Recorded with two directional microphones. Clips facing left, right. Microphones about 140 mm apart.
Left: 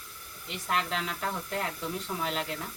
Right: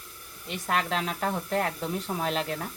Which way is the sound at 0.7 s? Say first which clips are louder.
Right 3 dB; 55° right (ahead or behind).